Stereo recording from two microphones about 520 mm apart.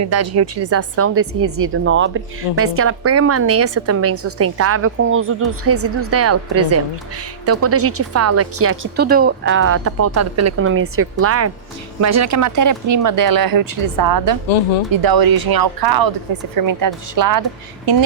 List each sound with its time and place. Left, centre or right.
0.0 s speech: right